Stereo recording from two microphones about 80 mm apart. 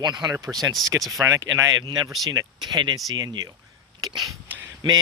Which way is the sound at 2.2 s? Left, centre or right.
Right.